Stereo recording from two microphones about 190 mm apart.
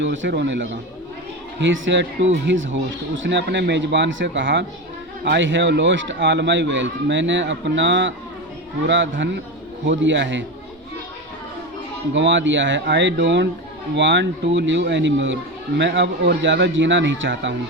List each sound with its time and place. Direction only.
0.0 s speech: 80° right
12.1 s speech: 75° right (ahead or behind)